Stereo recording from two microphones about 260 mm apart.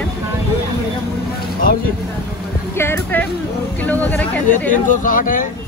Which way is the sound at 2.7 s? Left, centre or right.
Centre.